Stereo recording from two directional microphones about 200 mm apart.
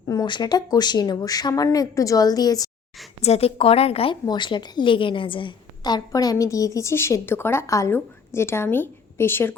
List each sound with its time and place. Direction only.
0.0 s speech: 20° left (ahead or behind)
3.2 s a woman's voice: 30° left (ahead or behind); by 9.6 s 10° left (ahead or behind)